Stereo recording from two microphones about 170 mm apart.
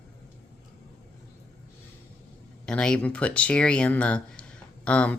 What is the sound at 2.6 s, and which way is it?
Speech, 5° left (ahead or behind).